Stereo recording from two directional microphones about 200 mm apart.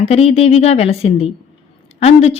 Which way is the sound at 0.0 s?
30° left (ahead or behind).